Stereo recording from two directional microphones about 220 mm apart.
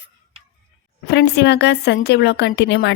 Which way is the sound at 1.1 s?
50° left (ahead or behind).